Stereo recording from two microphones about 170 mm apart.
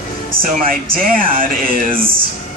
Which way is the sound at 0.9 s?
55° right (ahead or behind).